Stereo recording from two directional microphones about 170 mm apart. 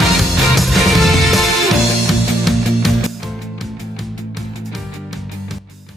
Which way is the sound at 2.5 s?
Centre (ahead or behind).